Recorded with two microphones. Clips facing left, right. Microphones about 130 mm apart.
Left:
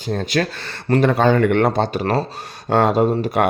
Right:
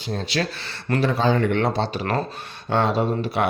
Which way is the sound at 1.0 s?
55° left (ahead or behind).